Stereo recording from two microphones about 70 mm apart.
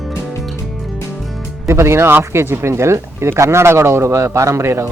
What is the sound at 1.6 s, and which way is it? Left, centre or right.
Speech, right.